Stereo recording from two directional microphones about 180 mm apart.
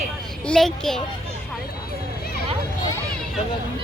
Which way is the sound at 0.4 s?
5° left (ahead or behind).